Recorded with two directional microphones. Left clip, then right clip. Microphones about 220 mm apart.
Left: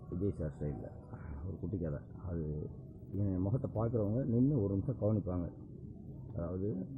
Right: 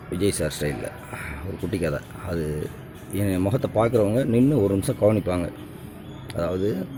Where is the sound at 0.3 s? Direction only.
35° right (ahead or behind).